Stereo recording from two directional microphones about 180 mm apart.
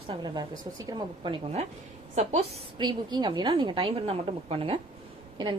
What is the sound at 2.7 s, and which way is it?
A woman's voice, 25° right (ahead or behind).